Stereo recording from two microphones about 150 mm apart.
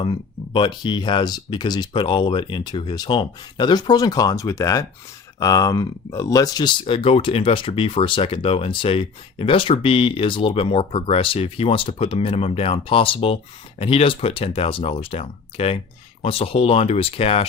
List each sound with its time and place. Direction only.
0.0 s speech: 30° left (ahead or behind)